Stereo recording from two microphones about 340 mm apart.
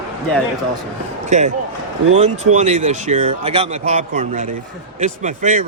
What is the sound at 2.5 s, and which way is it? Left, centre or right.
Speech, right.